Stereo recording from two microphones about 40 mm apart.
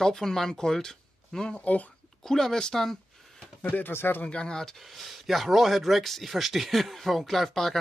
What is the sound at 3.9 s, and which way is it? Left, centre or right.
Speech, left.